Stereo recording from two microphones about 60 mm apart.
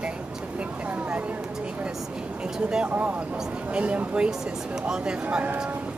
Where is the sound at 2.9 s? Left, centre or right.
Right.